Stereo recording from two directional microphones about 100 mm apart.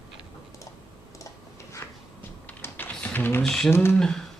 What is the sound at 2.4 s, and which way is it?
Typing, 20° left (ahead or behind).